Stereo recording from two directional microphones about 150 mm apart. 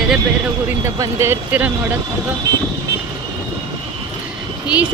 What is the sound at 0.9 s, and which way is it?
Speech, 20° right (ahead or behind).